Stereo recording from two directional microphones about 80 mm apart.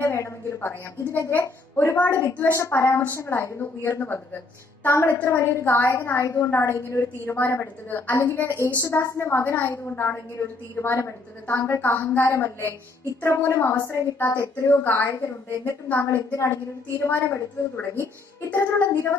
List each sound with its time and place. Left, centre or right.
0.0 s a woman's voice: left
0.6 s a woman's voice: left